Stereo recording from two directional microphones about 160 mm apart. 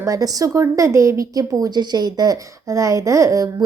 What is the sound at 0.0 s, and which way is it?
A woman's voice, 20° right (ahead or behind).